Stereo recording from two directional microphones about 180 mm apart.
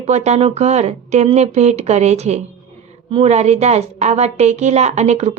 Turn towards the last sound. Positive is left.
turn(degrees=-35)  # may be behind; listen again after turning